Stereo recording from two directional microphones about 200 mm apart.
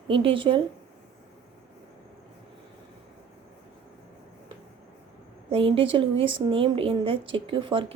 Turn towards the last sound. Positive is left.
turn(degrees=-25)  # may be behind; listen again after turning